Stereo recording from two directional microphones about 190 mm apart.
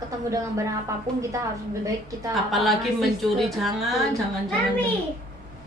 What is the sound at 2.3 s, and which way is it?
A woman's voice, centre (ahead or behind).